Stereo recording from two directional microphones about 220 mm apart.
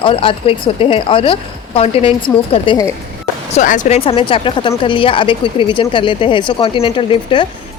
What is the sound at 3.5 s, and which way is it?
Speech, 35° left (ahead or behind).